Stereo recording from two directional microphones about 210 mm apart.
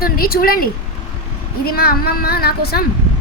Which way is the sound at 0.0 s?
45° left (ahead or behind).